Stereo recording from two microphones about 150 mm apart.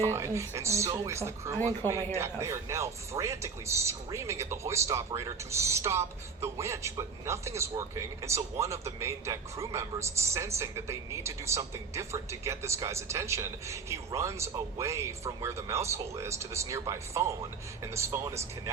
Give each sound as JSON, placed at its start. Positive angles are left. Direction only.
{"t": 0.1, "sound": "speech", "side_deg": -20}